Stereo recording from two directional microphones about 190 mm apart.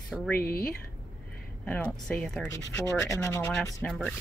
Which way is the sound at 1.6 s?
5° left (ahead or behind).